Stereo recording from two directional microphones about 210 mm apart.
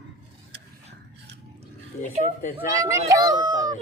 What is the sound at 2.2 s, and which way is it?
Speech, 40° left (ahead or behind).